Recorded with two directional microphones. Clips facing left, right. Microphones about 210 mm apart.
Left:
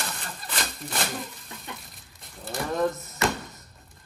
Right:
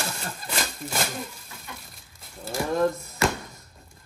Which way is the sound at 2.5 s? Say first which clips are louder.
Right 2 dB; centre (ahead or behind).